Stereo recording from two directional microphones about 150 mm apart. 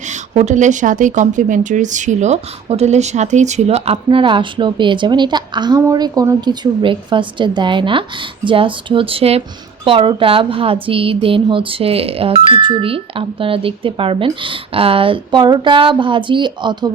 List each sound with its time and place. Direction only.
0.0 s speech: 50° right (ahead or behind)
3.9 s speech: 35° right (ahead or behind)